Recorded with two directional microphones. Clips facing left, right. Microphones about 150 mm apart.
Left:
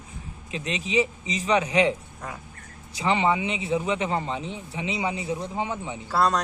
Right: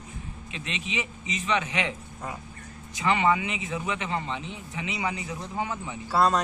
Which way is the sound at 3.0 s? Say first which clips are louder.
Left 1 dB; 25° left (ahead or behind).